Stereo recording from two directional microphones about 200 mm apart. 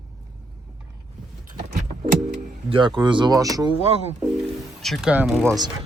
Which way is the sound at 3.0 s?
20° right (ahead or behind).